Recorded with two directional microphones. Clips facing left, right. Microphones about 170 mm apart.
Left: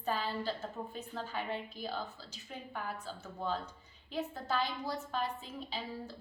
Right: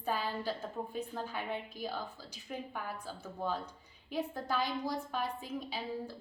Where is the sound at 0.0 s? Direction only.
10° right (ahead or behind).